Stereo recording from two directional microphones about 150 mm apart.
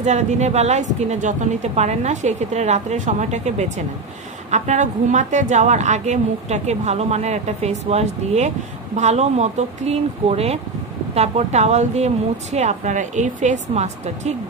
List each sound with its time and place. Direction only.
0.0 s a woman's voice: 50° right (ahead or behind)